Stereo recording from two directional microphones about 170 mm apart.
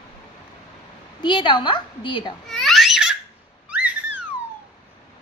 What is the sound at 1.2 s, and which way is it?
A woman's voice, 30° left (ahead or behind).